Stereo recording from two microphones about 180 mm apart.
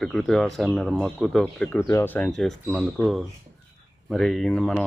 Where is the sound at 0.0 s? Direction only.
Centre (ahead or behind).